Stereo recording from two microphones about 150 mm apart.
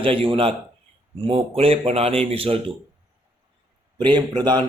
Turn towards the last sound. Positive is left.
turn(degrees=-30)  # may be behind; listen again after turning